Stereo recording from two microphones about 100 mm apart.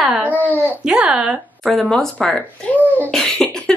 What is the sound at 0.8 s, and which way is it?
Speech, 10° right (ahead or behind).